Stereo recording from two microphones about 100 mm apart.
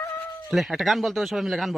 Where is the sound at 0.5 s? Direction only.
Centre (ahead or behind).